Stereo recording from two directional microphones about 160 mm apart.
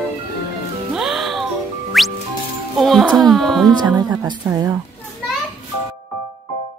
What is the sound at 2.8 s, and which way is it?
Baby cry, centre (ahead or behind).